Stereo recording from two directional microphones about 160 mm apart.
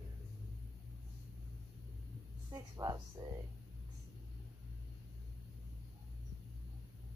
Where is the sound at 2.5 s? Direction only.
25° right (ahead or behind).